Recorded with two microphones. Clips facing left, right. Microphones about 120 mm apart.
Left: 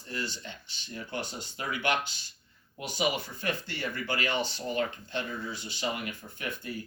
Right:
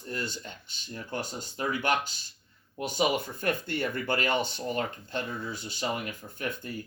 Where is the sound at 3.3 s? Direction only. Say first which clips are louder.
Right 4 dB; 50° right (ahead or behind).